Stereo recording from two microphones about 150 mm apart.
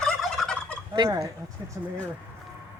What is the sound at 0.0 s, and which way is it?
Fowl, 5° left (ahead or behind).